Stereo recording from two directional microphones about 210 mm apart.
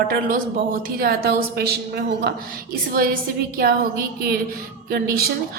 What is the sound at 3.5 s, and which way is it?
A woman's voice, 45° right (ahead or behind).